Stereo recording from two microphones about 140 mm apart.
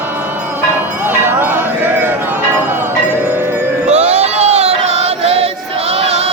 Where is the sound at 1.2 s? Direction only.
15° right (ahead or behind).